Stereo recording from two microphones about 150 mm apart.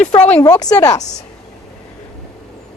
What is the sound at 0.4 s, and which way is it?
Speech, 25° left (ahead or behind).